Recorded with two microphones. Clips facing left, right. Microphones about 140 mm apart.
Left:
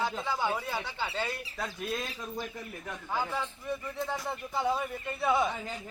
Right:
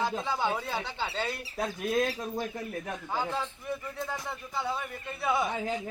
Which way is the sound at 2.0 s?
40° right (ahead or behind).